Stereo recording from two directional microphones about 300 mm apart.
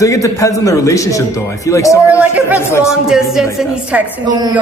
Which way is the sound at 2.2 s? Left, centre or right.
Centre.